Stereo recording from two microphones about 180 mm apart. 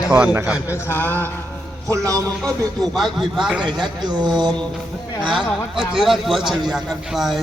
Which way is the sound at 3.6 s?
25° right (ahead or behind).